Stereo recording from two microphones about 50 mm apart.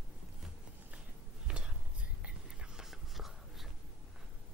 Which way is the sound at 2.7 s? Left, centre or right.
Centre.